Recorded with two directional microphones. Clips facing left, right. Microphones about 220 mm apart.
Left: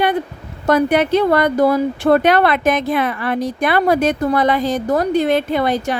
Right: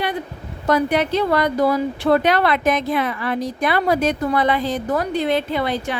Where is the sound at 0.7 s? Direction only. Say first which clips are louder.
Left 4 dB; 55° left (ahead or behind).